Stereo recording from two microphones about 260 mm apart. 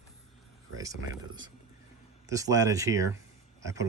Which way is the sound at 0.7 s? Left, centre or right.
Centre.